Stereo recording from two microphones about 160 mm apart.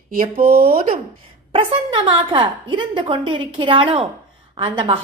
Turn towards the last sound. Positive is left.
turn(degrees=-30)  # may be behind; listen again after turning